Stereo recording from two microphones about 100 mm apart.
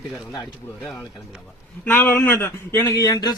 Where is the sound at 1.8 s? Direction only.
20° left (ahead or behind); by 3.3 s 40° left (ahead or behind).